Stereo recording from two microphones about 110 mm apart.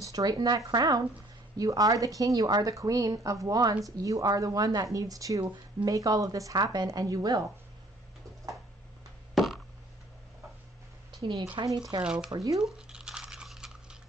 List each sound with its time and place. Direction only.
0.0 s speech: 35° right (ahead or behind)
9.3 s a sound: centre (ahead or behind)
11.1 s speech: 45° right (ahead or behind)
12.0 s speech: 10° right (ahead or behind)
12.3 s speech: 30° right (ahead or behind)
12.5 s a sound: 5° right (ahead or behind)